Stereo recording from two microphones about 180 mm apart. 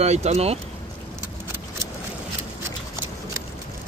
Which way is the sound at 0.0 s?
35° right (ahead or behind).